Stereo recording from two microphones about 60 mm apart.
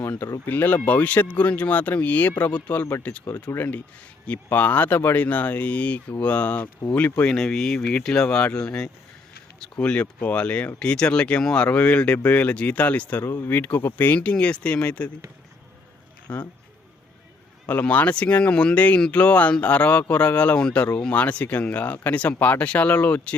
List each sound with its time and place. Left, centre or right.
0.0 s a sound: left
0.4 s speech: left
3.5 s speech: left
4.5 s speech: left
7.3 s speech: centre; by 14.2 s left
14.2 s speech: left
16.3 s speech: left
17.9 s speech: left